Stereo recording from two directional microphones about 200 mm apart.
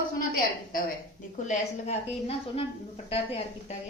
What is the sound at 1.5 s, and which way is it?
A woman's voice, 30° left (ahead or behind).